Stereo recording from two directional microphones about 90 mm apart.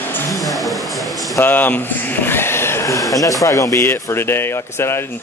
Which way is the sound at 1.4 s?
20° left (ahead or behind).